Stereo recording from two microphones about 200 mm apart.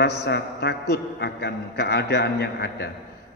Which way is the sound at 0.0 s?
55° left (ahead or behind).